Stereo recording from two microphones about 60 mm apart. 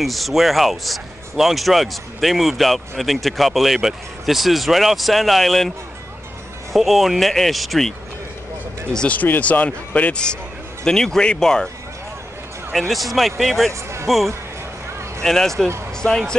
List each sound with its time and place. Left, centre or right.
0.0 s speech: centre
6.7 s speech: centre
8.9 s speech: centre
10.8 s speech: centre
12.7 s speech: centre